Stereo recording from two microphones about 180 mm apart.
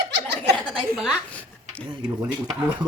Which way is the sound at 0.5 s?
5° left (ahead or behind).